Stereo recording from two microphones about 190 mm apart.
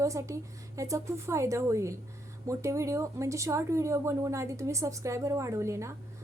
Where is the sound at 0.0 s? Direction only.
15° right (ahead or behind).